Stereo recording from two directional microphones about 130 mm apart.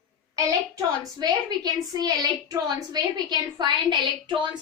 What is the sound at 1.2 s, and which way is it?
A woman's voice, 30° right (ahead or behind).